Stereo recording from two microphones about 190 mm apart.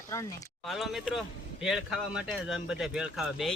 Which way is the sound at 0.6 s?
Centre (ahead or behind).